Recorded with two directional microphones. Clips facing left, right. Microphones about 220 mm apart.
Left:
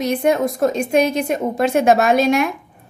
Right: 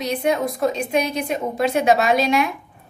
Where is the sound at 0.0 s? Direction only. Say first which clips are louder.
Left 4 dB; 45° left (ahead or behind).